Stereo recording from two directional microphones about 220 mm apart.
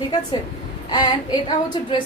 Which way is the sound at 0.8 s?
20° left (ahead or behind).